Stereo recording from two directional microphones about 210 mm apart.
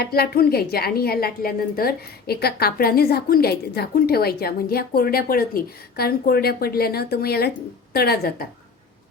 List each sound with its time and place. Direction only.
0.0 s a woman's voice: 45° left (ahead or behind)